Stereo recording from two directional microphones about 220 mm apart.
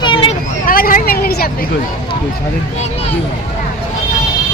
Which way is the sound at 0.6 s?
40° left (ahead or behind).